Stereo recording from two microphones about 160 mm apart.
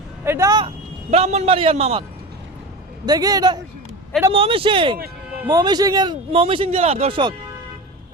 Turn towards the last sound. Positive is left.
turn(degrees=-35)  # may be behind; listen again after turning